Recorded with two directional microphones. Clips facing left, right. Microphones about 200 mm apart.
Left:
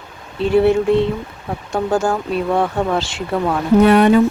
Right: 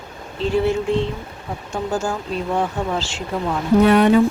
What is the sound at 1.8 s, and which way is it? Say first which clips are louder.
Speech: left 5 dB; 60° left (ahead or behind).